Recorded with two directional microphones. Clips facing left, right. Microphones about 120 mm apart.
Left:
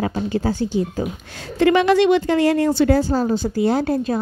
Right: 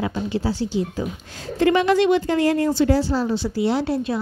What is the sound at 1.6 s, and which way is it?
Speech, 80° left.